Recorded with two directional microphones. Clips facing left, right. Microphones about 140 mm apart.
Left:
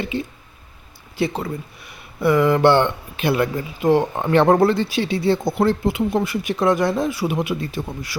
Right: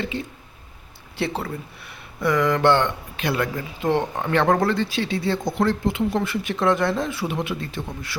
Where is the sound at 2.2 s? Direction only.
10° left (ahead or behind).